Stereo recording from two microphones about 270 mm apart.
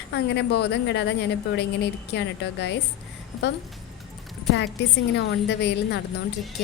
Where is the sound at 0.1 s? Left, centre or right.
Left.